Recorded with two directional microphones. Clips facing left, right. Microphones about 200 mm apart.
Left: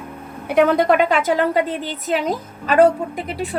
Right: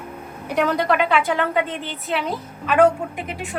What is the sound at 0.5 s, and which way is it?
A woman's voice, 55° left (ahead or behind).